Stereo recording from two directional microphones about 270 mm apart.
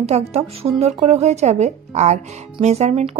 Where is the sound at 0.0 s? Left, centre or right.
Right.